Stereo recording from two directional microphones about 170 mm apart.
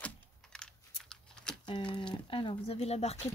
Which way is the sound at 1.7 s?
30° left (ahead or behind).